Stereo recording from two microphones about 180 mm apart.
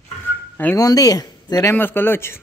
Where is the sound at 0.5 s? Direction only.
15° left (ahead or behind).